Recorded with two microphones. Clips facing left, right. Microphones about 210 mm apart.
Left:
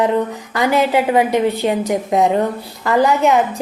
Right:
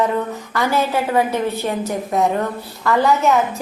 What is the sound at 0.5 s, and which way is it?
A woman's voice, 15° left (ahead or behind).